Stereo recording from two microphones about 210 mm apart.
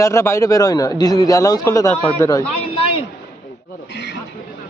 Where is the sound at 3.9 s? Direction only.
55° left (ahead or behind).